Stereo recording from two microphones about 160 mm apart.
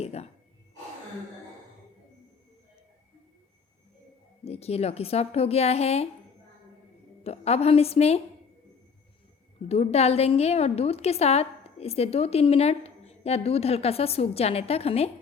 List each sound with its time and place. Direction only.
0.0 s gasp: 40° left (ahead or behind)
4.4 s a woman's voice: 40° left (ahead or behind)
7.3 s a woman's voice: 40° left (ahead or behind)
9.6 s a woman's voice: 40° left (ahead or behind)